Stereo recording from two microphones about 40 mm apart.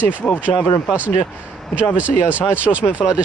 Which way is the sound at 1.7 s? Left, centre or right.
Right.